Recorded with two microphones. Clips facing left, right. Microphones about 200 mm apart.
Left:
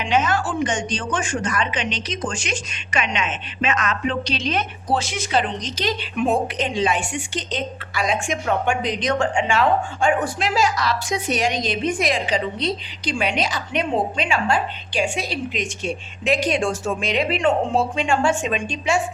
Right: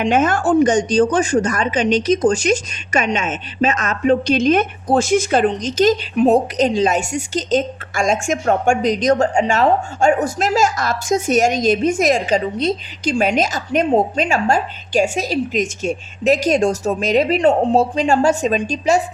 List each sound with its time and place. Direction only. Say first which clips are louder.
0.0 s speech: right 5 dB; 50° right (ahead or behind)